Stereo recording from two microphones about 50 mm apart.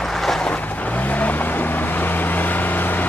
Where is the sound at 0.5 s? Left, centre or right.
Left.